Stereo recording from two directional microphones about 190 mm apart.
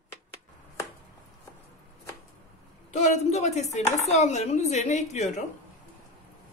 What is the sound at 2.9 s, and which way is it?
Speech, 40° left (ahead or behind).